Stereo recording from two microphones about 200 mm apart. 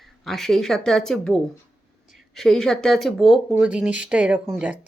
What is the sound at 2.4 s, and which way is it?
Speech, centre (ahead or behind).